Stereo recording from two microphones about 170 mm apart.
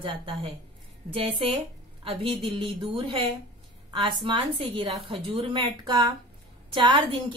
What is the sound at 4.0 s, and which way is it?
A woman's voice, 30° right (ahead or behind).